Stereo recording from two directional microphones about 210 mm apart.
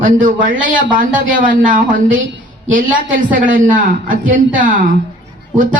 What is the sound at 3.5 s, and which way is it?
A woman's voice, 40° right (ahead or behind).